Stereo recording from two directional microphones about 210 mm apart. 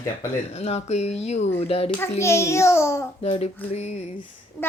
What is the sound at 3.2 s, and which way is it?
Speech, 30° left (ahead or behind).